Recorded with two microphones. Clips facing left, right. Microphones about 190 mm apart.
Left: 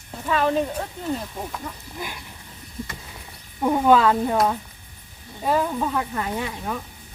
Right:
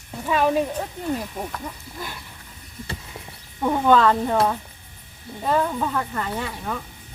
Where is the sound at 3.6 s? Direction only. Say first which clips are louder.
Even; 10° left (ahead or behind).